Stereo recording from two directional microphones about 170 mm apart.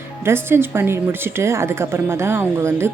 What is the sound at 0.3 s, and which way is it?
A woman's voice, 15° right (ahead or behind).